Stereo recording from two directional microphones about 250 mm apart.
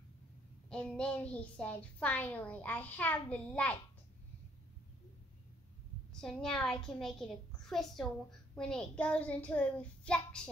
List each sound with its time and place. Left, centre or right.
0.7 s a child's voice: centre
6.2 s a child's voice: centre